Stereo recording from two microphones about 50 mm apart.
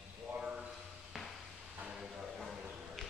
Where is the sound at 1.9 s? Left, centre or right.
Centre.